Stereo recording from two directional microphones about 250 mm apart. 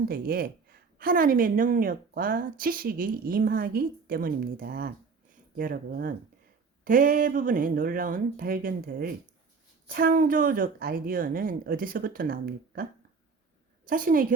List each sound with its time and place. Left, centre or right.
0.1 s a woman's voice: right